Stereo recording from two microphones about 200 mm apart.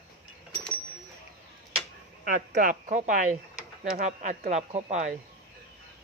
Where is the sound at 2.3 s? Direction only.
45° right (ahead or behind).